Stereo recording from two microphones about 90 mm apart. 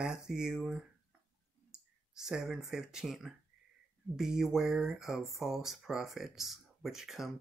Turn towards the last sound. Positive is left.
turn(degrees=-5)  # may be behind; listen again after turning